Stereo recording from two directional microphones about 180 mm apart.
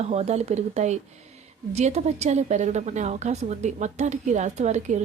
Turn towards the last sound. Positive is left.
turn(degrees=-40)  # may be behind; listen again after turning